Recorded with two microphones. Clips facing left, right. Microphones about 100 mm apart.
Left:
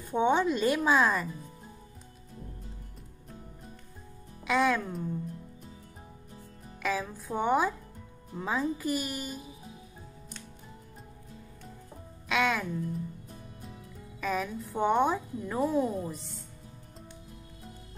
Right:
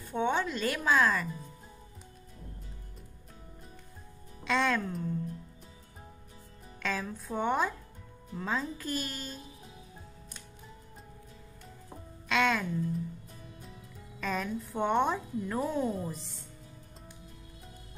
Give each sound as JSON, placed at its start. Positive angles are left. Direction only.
{"t": 0.0, "sound": "a woman's voice", "side_deg": 15}
{"t": 4.5, "sound": "a woman's voice", "side_deg": 10}
{"t": 6.8, "sound": "a woman's voice", "side_deg": 10}
{"t": 12.3, "sound": "a woman's voice", "side_deg": 5}
{"t": 14.2, "sound": "a woman's voice", "side_deg": 5}